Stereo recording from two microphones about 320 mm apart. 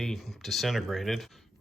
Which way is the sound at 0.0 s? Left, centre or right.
Centre.